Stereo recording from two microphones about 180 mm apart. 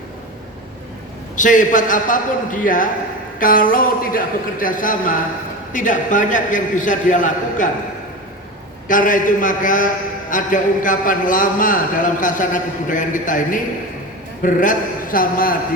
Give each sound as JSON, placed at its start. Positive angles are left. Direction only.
{"t": 1.4, "sound": "a man's voice", "side_deg": 45}
{"t": 8.9, "sound": "a man's voice", "side_deg": 45}